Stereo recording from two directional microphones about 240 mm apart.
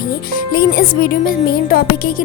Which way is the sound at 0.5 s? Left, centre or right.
Left.